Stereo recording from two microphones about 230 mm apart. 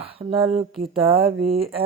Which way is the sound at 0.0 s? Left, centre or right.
Right.